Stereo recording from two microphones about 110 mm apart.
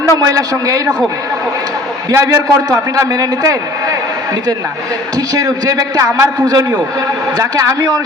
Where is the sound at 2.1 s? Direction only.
30° right (ahead or behind).